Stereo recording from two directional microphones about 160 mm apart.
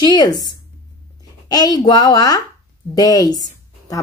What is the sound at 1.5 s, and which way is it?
A woman's voice, 25° left (ahead or behind).